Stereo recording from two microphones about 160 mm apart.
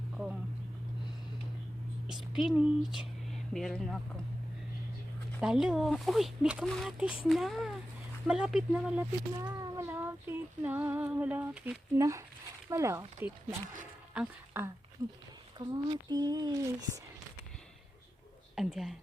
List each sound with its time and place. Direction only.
2.0 s a woman's voice: centre (ahead or behind)
5.4 s speech: 5° right (ahead or behind)
9.5 s cat: 20° right (ahead or behind)
12.6 s speech: 15° right (ahead or behind)
18.5 s speech: centre (ahead or behind)